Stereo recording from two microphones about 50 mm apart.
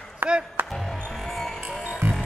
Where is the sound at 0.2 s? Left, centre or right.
Right.